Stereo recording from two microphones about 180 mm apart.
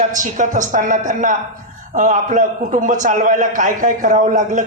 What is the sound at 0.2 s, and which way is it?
A man's voice, 45° right (ahead or behind).